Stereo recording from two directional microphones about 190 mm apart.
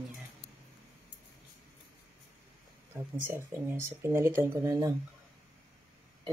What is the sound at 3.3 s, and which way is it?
Speech, 10° right (ahead or behind).